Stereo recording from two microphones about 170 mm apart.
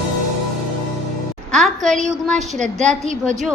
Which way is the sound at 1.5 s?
5° left (ahead or behind).